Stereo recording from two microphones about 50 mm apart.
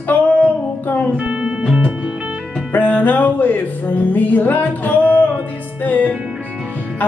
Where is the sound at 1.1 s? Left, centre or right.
Right.